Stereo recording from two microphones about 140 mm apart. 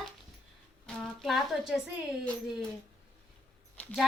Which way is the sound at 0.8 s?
Centre (ahead or behind).